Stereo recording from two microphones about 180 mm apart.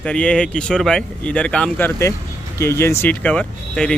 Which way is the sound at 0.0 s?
5° left (ahead or behind).